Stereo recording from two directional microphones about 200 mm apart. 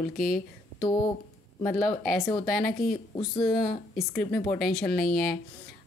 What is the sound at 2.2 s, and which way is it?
Speech, 20° left (ahead or behind).